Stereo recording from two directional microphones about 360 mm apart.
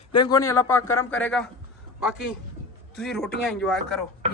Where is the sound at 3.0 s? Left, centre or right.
Centre.